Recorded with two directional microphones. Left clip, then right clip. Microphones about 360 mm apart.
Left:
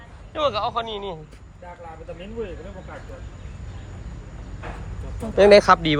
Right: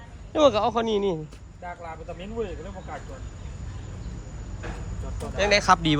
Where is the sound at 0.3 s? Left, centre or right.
Right.